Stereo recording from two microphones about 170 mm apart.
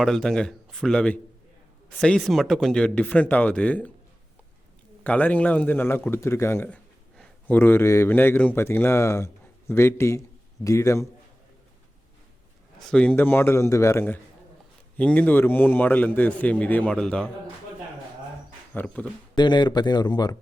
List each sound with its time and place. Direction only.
0.0 s a man's voice: 5° left (ahead or behind)
5.0 s a man's voice: 10° left (ahead or behind)
12.8 s a man's voice: 5° left (ahead or behind)
18.7 s a man's voice: 10° left (ahead or behind)
19.4 s speech: 25° left (ahead or behind)